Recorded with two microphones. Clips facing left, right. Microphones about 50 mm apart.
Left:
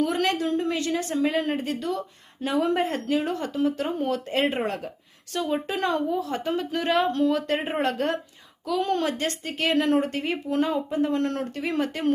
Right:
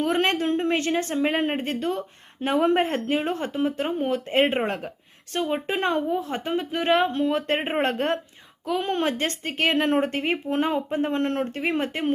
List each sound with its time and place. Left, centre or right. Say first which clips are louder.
0.0 s a woman's voice: right 1 dB; right